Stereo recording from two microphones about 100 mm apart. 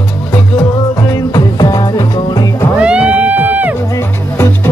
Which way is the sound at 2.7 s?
10° right (ahead or behind).